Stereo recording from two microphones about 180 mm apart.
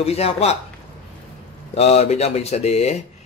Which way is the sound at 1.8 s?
35° left (ahead or behind).